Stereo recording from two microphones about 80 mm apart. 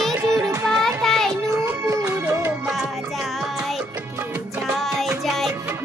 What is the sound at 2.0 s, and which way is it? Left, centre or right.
Music, right.